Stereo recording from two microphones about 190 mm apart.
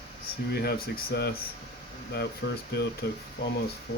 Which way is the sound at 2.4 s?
60° left (ahead or behind).